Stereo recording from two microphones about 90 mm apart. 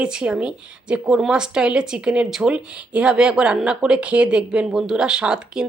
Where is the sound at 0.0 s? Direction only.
10° right (ahead or behind).